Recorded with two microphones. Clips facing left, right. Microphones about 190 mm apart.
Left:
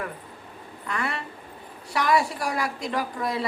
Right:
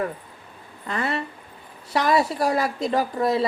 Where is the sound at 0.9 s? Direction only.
25° right (ahead or behind).